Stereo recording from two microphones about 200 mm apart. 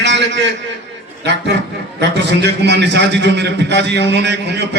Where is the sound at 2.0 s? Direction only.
60° right (ahead or behind).